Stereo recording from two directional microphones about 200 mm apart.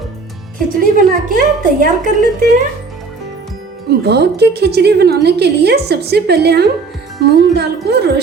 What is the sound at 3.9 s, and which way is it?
A woman's voice, 55° right (ahead or behind).